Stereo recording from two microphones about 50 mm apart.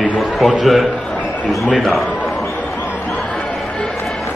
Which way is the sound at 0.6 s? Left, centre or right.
Centre.